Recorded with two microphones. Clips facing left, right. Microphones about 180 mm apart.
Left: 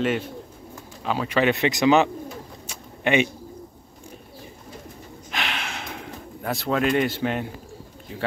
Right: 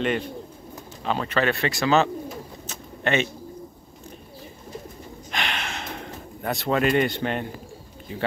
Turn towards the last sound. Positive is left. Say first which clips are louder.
# even
turn(degrees=5)  # may be behind; listen again after turning